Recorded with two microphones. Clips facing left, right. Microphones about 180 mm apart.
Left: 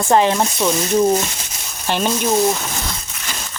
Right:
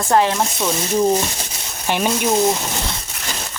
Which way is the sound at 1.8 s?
10° right (ahead or behind).